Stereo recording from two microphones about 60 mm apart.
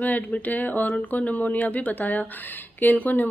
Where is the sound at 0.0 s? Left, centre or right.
Left.